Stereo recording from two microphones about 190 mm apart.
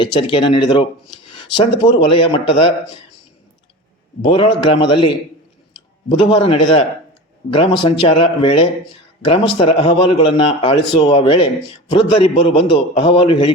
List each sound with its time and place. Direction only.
0.0 s a man's voice: 25° left (ahead or behind)
4.2 s a man's voice: 25° left (ahead or behind)
6.1 s a man's voice: 25° left (ahead or behind)